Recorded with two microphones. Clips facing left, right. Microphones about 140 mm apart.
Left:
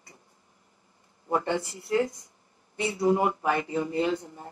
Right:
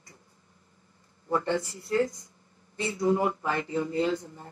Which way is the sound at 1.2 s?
20° left (ahead or behind).